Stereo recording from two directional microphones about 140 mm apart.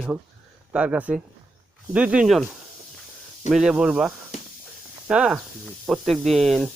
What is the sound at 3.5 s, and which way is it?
Speech, 5° right (ahead or behind).